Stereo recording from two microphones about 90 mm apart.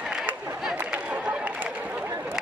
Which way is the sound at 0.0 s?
5° right (ahead or behind).